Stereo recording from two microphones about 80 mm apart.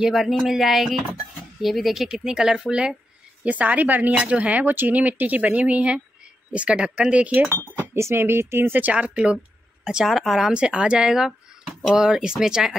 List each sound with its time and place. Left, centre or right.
0.0 s speech: centre
7.9 s speech: right; by 12.7 s centre